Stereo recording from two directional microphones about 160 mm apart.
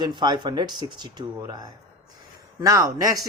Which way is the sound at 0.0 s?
25° right (ahead or behind).